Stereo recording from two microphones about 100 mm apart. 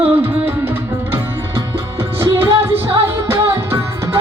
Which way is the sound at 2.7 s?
70° right (ahead or behind).